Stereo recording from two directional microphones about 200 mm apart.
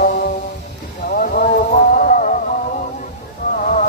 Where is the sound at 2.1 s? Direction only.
40° left (ahead or behind).